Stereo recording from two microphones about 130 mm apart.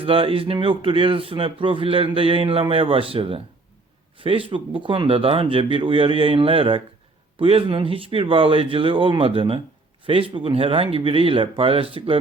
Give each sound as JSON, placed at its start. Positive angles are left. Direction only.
{"t": 0.0, "sound": "speech", "side_deg": -45}